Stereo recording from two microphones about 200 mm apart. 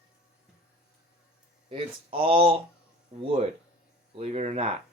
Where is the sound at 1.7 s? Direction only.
30° right (ahead or behind).